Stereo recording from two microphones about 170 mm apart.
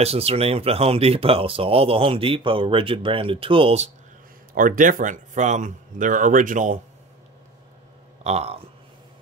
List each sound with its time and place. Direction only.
0.0 s speech: 35° right (ahead or behind)
4.6 s speech: 50° right (ahead or behind)
8.2 s speech: 40° right (ahead or behind)